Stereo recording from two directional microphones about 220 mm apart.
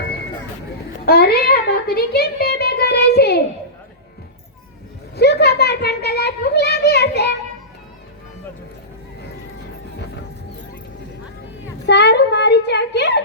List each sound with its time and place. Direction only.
1.0 s a child's voice: 45° left (ahead or behind)
5.1 s a child's voice: 50° left (ahead or behind)
11.9 s a child's voice: 50° left (ahead or behind)